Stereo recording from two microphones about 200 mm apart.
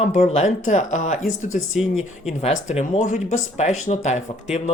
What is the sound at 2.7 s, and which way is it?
Speech, 35° left (ahead or behind).